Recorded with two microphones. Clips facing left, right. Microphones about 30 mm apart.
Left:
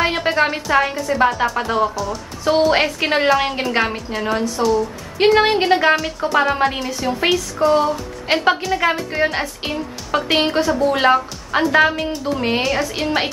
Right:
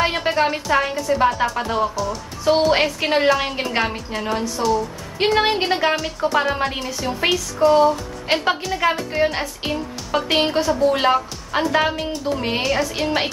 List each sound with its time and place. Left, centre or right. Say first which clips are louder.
0.0 s speech: left 2 dB; centre